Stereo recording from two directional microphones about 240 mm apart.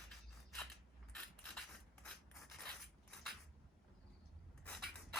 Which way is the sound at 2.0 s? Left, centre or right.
Centre.